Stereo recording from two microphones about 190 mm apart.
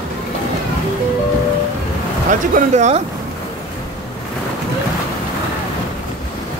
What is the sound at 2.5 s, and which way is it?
Speech, 40° right (ahead or behind).